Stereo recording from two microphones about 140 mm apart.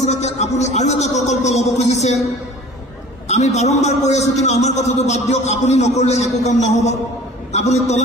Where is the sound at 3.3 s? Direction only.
55° left (ahead or behind).